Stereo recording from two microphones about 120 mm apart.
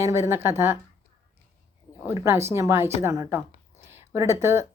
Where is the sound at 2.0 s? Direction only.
20° right (ahead or behind).